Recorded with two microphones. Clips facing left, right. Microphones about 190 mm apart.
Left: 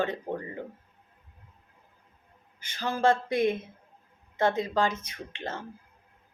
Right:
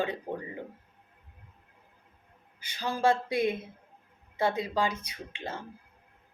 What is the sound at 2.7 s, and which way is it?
Speech, 10° right (ahead or behind).